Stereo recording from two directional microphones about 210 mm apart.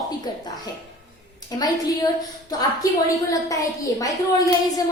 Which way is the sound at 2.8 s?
15° left (ahead or behind).